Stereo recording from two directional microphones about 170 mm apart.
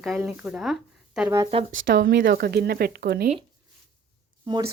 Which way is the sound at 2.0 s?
80° right.